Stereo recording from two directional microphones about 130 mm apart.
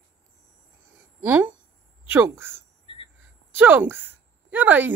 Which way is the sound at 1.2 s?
15° right (ahead or behind).